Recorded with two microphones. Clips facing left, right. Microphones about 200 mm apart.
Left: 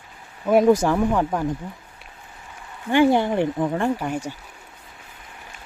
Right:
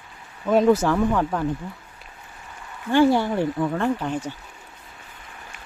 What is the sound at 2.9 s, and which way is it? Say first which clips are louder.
Speech: left 1 dB; 20° left (ahead or behind).